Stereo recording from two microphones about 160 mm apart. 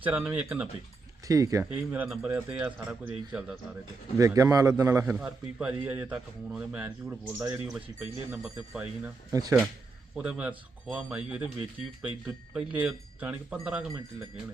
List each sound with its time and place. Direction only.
0.0 s a man's voice: 10° right (ahead or behind)
1.3 s a man's voice: 20° right (ahead or behind)
1.9 s a man's voice: 5° right (ahead or behind)
4.2 s a man's voice: 20° right (ahead or behind)
9.3 s a man's voice: 20° right (ahead or behind)
10.2 s a man's voice: 5° right (ahead or behind)
12.5 s a man's voice: 5° right (ahead or behind)